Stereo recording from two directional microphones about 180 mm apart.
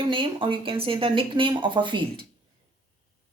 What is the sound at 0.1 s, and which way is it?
A woman's voice, 30° right (ahead or behind).